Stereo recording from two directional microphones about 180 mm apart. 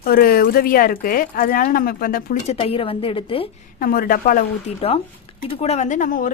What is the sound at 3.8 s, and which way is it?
A woman's voice, 55° left (ahead or behind).